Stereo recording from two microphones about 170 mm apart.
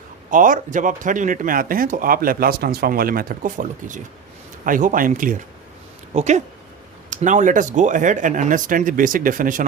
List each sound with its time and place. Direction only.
0.3 s speech: 50° right (ahead or behind)